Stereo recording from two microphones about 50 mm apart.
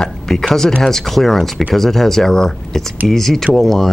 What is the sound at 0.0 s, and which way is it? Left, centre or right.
Speech, centre.